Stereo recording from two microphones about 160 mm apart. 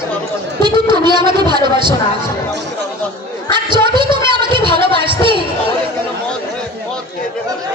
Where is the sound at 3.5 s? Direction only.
30° right (ahead or behind).